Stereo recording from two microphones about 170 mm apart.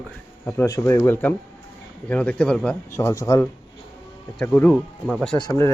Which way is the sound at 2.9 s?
15° left (ahead or behind).